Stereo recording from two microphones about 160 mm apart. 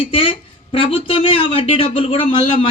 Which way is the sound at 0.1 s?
35° left (ahead or behind).